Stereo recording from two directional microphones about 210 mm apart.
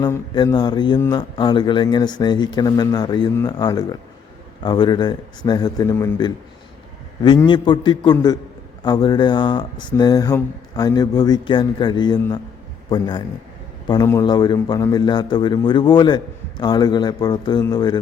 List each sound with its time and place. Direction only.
0.0 s a man's voice: 15° left (ahead or behind)